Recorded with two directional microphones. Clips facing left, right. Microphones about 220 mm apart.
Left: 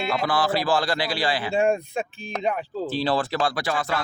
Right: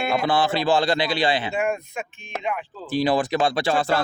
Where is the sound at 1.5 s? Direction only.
30° left (ahead or behind).